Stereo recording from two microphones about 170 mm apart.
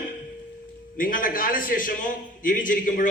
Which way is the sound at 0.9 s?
55° left (ahead or behind).